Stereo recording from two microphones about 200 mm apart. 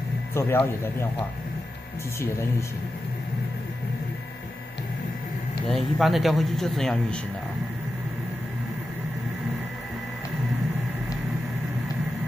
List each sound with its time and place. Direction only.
0.3 s speech: 10° left (ahead or behind)
5.7 s speech: centre (ahead or behind)